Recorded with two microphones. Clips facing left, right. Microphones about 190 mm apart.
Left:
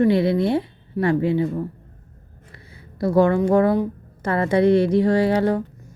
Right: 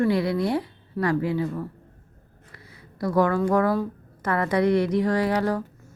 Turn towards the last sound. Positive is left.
turn(degrees=25)  # may be behind; listen again after turning